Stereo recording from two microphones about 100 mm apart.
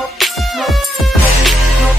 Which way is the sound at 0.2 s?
Centre (ahead or behind).